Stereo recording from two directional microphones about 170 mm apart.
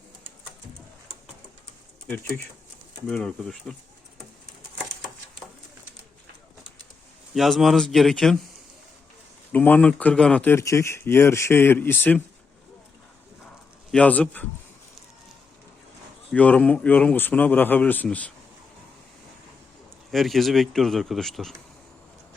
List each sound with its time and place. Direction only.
2.0 s speech: 10° left (ahead or behind)
7.3 s speech: centre (ahead or behind)
9.5 s speech: 10° left (ahead or behind)
13.9 s speech: 10° left (ahead or behind)
16.3 s speech: 10° left (ahead or behind)
20.1 s speech: centre (ahead or behind)